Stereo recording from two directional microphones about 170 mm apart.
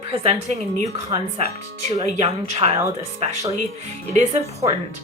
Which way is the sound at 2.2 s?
40° right (ahead or behind).